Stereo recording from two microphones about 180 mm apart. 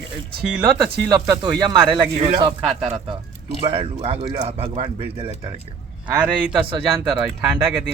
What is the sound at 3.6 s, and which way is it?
Speech, 35° right (ahead or behind).